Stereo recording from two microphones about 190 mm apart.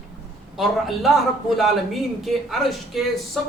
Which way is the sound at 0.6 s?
Centre (ahead or behind).